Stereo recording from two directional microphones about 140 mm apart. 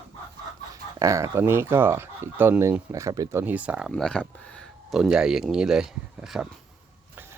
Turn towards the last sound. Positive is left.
turn(degrees=-5)  # may be behind; listen again after turning